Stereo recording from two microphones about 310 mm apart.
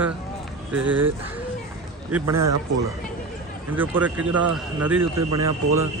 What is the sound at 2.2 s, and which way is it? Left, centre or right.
Speech, right.